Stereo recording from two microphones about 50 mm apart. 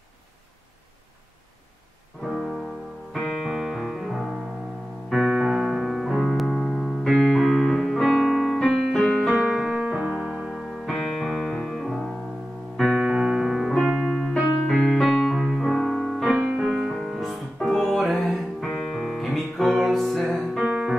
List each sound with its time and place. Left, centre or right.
2.2 s music: centre
5.3 s keyboard: centre
7.0 s music: centre
9.5 s piano: centre
9.8 s keyboard: right
10.5 s music: centre
12.9 s piano: right
13.8 s music: centre
20.6 s music: right